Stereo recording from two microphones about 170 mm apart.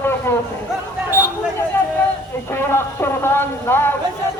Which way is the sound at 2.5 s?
15° left (ahead or behind).